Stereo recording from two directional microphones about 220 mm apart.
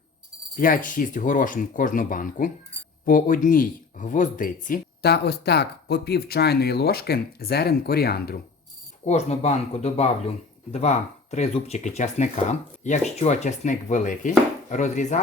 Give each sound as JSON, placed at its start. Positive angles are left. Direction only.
{"t": 0.5, "sound": "speech", "side_deg": 40}
{"t": 9.0, "sound": "speech", "side_deg": 30}